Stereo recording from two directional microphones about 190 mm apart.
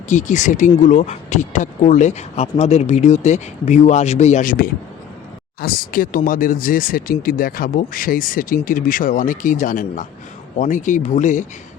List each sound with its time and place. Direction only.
0.1 s speech: 40° left (ahead or behind)